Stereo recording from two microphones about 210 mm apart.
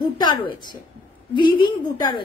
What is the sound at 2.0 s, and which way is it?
Speech, 20° left (ahead or behind).